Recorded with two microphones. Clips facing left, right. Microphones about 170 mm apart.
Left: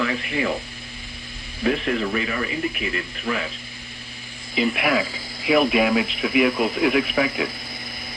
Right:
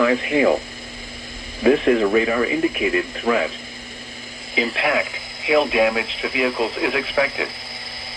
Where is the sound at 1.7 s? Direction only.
50° right (ahead or behind).